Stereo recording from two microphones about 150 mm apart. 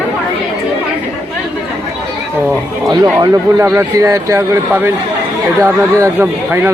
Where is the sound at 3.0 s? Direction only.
20° right (ahead or behind).